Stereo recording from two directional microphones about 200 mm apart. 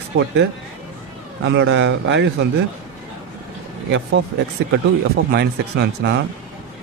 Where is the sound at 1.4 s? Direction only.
65° right (ahead or behind).